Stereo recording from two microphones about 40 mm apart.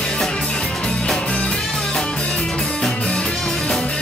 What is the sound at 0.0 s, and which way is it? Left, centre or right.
Music, centre.